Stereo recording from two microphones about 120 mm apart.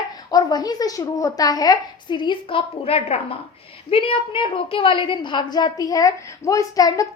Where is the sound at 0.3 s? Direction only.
30° left (ahead or behind).